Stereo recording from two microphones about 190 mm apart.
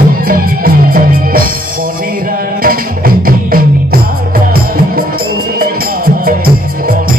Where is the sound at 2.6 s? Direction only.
50° right (ahead or behind).